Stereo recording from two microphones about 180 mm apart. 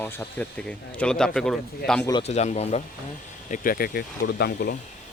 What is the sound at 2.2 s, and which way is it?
Speech, 40° left (ahead or behind).